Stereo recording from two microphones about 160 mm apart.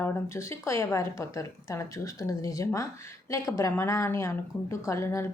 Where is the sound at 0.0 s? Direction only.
15° left (ahead or behind).